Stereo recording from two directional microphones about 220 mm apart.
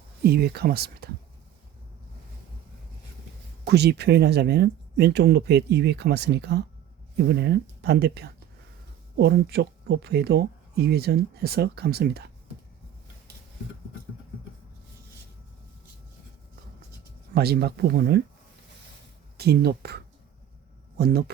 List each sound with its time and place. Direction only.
0.2 s speech: 45° right (ahead or behind)
3.7 s speech: 50° right (ahead or behind)
17.3 s speech: 45° right (ahead or behind)
19.4 s speech: 45° right (ahead or behind)
21.0 s speech: 45° right (ahead or behind)